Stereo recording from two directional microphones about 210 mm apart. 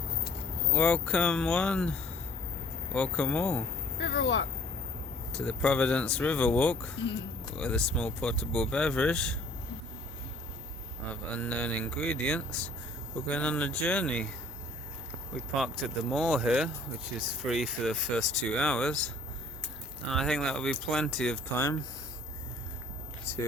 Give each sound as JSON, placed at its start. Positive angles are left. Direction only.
{"t": 0.7, "sound": "speech", "side_deg": 5}
{"t": 4.0, "sound": "speech", "side_deg": 60}
{"t": 5.3, "sound": "speech", "side_deg": 5}
{"t": 11.1, "sound": "speech", "side_deg": 5}
{"t": 15.4, "sound": "speech", "side_deg": 0}